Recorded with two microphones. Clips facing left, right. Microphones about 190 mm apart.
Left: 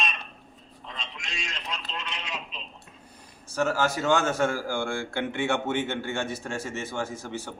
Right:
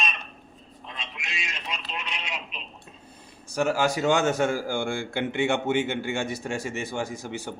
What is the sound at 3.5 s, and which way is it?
A man's voice, 15° right (ahead or behind).